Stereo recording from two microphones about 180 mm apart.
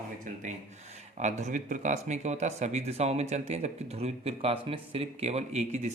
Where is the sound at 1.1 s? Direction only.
40° right (ahead or behind).